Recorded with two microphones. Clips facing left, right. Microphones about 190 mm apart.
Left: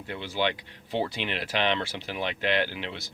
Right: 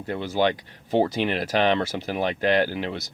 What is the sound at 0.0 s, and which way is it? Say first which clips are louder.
Speech: right 6 dB; 40° right (ahead or behind).